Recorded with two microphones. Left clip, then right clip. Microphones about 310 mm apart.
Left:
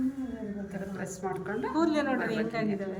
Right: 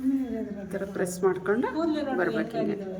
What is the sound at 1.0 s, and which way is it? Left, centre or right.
Speech, centre.